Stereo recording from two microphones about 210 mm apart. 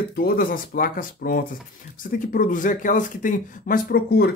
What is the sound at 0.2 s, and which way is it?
Speech, 45° left (ahead or behind).